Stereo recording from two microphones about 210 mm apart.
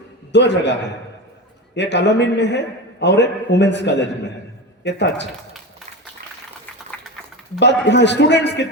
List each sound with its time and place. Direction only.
0.3 s a man's voice: 55° left (ahead or behind)
7.6 s a man's voice: 55° left (ahead or behind)